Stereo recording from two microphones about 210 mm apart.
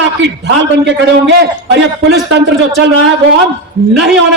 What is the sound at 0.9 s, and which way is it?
A man's voice, 55° right (ahead or behind).